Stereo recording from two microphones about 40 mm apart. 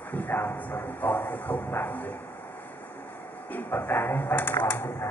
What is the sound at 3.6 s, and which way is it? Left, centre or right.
Speech, left.